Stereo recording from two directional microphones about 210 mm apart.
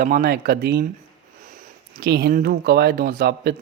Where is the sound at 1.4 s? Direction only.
35° right (ahead or behind).